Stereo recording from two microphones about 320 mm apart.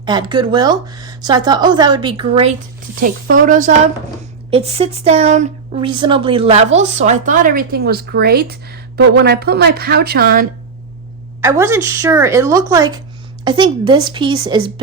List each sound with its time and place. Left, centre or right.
0.0 s speech: centre; by 10.4 s right
11.3 s speech: centre